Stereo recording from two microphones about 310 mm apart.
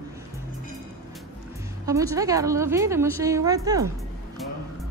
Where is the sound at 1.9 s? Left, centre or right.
Centre.